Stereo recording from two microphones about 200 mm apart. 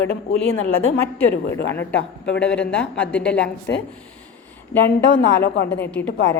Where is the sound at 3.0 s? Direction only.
5° left (ahead or behind).